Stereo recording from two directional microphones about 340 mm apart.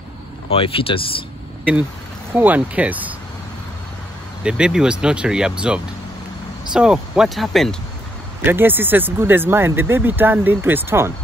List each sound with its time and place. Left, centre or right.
0.5 s speech: centre
2.3 s speech: centre
4.4 s speech: centre